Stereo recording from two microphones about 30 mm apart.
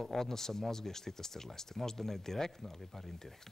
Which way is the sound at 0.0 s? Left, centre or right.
Centre.